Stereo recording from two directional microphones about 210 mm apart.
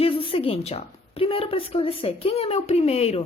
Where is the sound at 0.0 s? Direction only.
25° left (ahead or behind).